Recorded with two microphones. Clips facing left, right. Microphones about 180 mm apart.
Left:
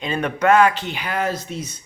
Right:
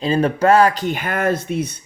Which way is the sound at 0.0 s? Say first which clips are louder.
Right 4 dB; 35° right (ahead or behind).